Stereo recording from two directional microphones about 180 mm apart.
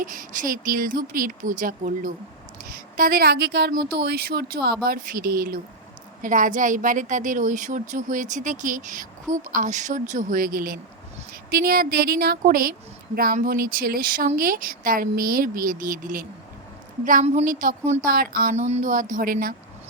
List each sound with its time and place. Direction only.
0.0 s a woman's voice: 50° right (ahead or behind)
17.2 s a woman's voice: 45° right (ahead or behind)
18.1 s a woman's voice: 55° right (ahead or behind)
18.5 s a woman's voice: 35° right (ahead or behind); by 19.5 s 55° right (ahead or behind)